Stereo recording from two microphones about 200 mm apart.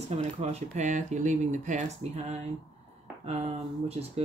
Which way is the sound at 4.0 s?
35° right (ahead or behind).